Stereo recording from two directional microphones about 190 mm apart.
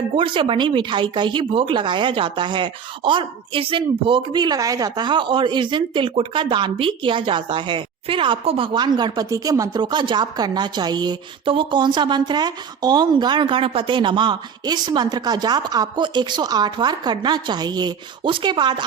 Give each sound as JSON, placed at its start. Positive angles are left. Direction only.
{"t": 0.2, "sound": "speech", "side_deg": -25}